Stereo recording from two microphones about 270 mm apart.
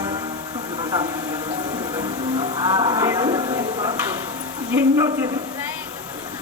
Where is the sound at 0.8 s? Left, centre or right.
Centre.